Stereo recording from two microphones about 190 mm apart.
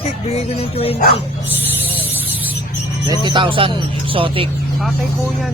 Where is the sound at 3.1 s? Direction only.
25° right (ahead or behind).